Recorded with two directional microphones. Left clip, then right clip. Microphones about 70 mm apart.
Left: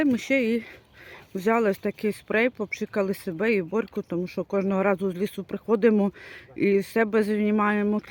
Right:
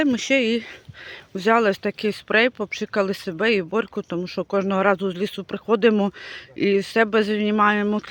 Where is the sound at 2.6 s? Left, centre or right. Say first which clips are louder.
Right 4 dB; left.